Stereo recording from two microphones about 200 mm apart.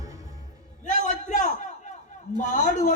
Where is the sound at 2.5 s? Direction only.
40° left (ahead or behind).